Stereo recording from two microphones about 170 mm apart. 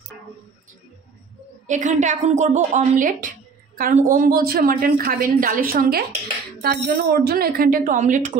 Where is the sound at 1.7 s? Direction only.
45° right (ahead or behind).